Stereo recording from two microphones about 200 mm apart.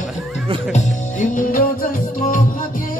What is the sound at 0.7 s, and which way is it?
Music, 40° left (ahead or behind).